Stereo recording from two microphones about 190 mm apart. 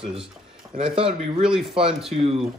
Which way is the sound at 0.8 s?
30° right (ahead or behind).